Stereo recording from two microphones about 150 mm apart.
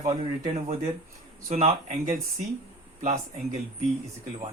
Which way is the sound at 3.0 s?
50° right (ahead or behind).